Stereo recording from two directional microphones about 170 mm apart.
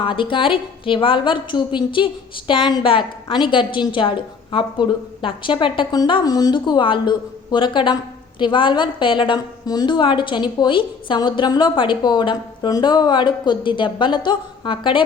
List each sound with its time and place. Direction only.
0.0 s a woman's voice: 30° left (ahead or behind)